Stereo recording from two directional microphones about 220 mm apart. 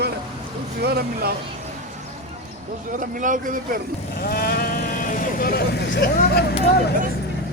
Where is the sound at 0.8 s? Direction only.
45° right (ahead or behind).